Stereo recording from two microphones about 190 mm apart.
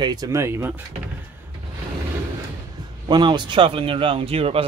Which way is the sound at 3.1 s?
25° right (ahead or behind).